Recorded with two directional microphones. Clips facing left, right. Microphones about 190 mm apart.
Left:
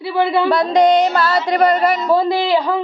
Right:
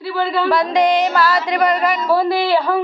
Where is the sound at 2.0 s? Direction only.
20° left (ahead or behind).